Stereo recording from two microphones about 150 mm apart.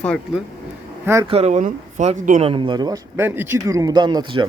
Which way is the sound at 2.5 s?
35° right (ahead or behind).